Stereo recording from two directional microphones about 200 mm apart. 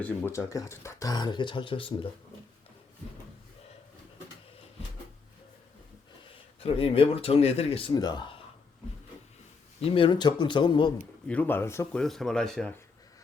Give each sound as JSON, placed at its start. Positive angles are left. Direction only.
{"t": 0.0, "sound": "speech", "side_deg": 10}
{"t": 6.6, "sound": "speech", "side_deg": 30}
{"t": 9.8, "sound": "speech", "side_deg": 25}
{"t": 11.3, "sound": "speech", "side_deg": 10}
{"t": 12.0, "sound": "speech", "side_deg": 0}